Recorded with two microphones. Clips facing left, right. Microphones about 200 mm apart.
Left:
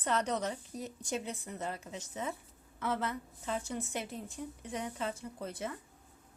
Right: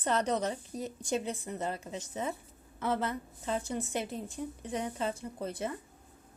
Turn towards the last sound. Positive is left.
turn(degrees=-30)  # may be behind; listen again after turning